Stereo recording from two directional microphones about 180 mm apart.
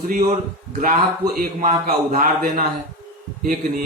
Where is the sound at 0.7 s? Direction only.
50° right (ahead or behind).